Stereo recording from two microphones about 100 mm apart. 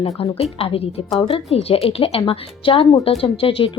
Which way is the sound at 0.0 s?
80° left.